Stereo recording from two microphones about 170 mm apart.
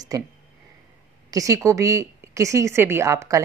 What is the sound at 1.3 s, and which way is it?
Speech, 20° right (ahead or behind).